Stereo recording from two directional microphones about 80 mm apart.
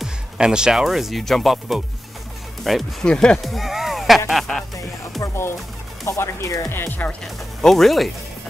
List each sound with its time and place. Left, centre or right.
0.0 s speech: centre
3.1 s speech: centre
3.4 s a sound: centre
4.3 s speech: centre
5.2 s speech: left
6.7 s speech: left
7.6 s speech: centre